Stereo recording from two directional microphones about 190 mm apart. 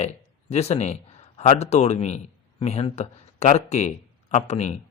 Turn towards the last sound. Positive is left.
turn(degrees=35)  # may be behind; listen again after turning